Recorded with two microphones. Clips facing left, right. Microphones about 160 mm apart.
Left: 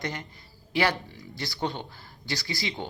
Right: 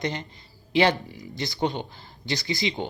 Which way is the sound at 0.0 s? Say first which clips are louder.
Right 4 dB; 25° right (ahead or behind).